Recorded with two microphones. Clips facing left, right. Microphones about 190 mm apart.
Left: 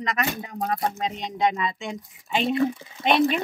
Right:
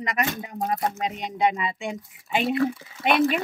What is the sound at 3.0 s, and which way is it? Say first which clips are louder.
Speech: left 1 dB; 20° left (ahead or behind).